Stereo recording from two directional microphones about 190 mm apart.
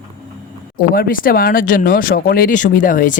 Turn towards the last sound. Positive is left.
turn(degrees=45)  # may be behind; listen again after turning